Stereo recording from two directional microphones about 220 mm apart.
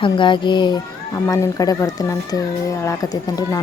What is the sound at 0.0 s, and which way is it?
A child's voice, 20° left (ahead or behind).